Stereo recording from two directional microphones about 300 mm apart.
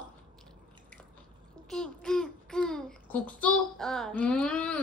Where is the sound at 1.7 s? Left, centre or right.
Centre.